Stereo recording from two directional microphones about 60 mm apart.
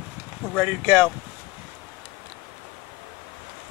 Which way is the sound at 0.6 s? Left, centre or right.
Centre.